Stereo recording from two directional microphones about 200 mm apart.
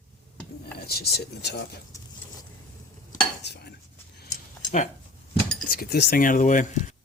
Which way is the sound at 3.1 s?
60° left (ahead or behind).